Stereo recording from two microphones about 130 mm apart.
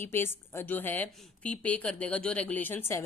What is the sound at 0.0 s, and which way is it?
A woman's voice, 15° left (ahead or behind).